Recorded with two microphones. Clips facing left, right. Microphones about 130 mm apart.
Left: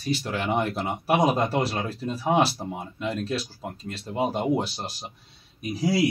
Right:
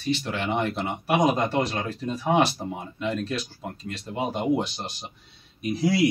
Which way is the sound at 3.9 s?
35° left (ahead or behind).